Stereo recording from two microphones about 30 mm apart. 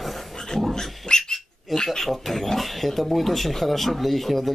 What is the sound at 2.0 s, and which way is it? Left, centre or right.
Speech, centre.